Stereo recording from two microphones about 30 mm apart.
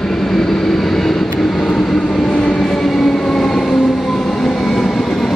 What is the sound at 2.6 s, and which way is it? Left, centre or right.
Train, centre.